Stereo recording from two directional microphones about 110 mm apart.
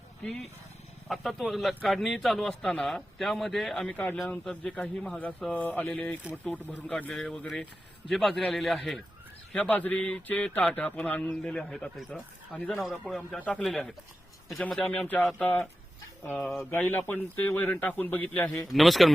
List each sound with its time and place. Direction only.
0.2 s a man's voice: centre (ahead or behind)
9.6 s a man's voice: 15° left (ahead or behind)
16.4 s a man's voice: centre (ahead or behind)
16.7 s speech: 15° left (ahead or behind)
18.5 s a man's voice: centre (ahead or behind)